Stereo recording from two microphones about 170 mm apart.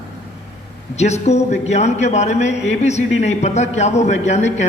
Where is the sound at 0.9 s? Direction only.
40° left (ahead or behind).